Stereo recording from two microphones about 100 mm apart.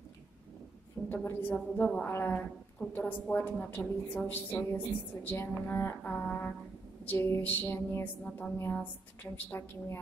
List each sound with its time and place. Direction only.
1.0 s a woman's voice: 20° left (ahead or behind)
1.5 s a woman's voice: 10° left (ahead or behind)
2.0 s a woman's voice: 20° left (ahead or behind)